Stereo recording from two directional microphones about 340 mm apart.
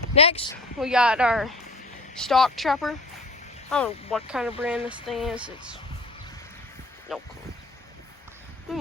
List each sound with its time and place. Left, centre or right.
0.1 s a woman's voice: centre
0.8 s speech: centre
7.1 s speech: centre